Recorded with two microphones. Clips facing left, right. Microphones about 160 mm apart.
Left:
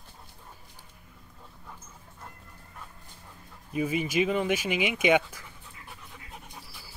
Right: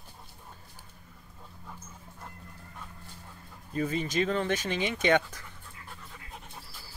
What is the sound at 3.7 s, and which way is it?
Speech, 10° left (ahead or behind).